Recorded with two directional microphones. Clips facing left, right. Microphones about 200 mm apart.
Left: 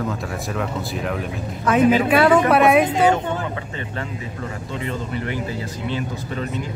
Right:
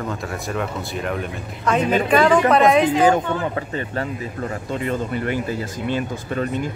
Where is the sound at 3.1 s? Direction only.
40° right (ahead or behind).